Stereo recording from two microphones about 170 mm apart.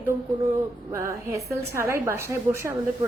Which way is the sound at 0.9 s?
15° right (ahead or behind).